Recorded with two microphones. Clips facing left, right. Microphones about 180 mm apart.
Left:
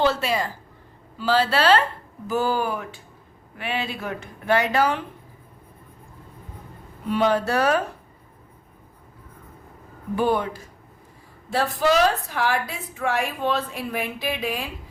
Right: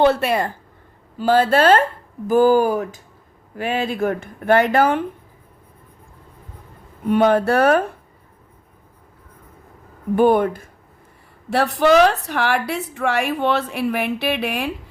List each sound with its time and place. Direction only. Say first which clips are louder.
0.0 s speech: right 6 dB; 55° right (ahead or behind)
7.1 s speech: right 6 dB; 55° right (ahead or behind)
10.2 s speech: right 7 dB; 55° right (ahead or behind)
11.4 s a woman's voice: right 5 dB; 70° right (ahead or behind)